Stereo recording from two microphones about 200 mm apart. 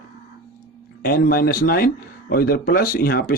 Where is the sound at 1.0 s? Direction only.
50° left (ahead or behind).